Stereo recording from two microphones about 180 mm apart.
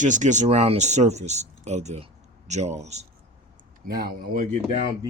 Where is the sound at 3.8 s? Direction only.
55° right (ahead or behind).